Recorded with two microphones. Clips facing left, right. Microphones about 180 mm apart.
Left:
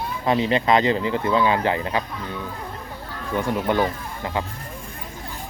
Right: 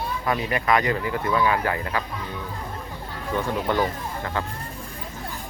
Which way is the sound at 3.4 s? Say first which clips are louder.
Left 2 dB; 15° left (ahead or behind).